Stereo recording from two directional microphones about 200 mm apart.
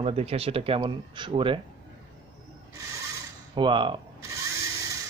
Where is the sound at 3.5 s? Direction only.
25° right (ahead or behind).